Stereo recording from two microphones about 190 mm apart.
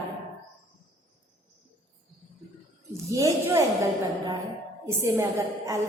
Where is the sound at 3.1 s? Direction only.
15° right (ahead or behind).